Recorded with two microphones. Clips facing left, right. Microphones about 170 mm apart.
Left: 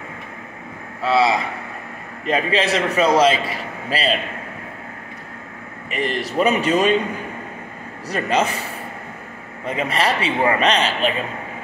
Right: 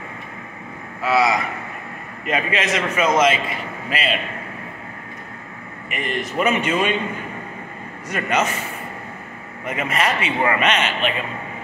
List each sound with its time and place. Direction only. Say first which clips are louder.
1.0 s a man's voice: left 1 dB; 30° left (ahead or behind)
5.9 s a man's voice: left 3 dB; 35° left (ahead or behind)
8.1 s a man's voice: left 2 dB; 30° left (ahead or behind)
9.7 s a man's voice: left 1 dB; 30° left (ahead or behind)